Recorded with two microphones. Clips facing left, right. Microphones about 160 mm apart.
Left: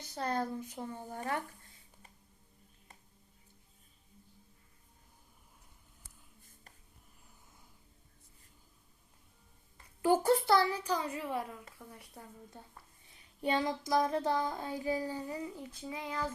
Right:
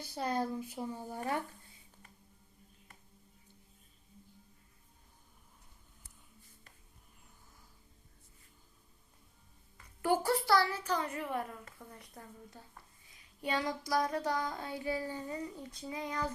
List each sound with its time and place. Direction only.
0.1 s speech: 10° right (ahead or behind)
10.0 s a woman's voice: 20° left (ahead or behind)
13.1 s a sound: 30° left (ahead or behind)
14.8 s a woman's voice: 15° left (ahead or behind)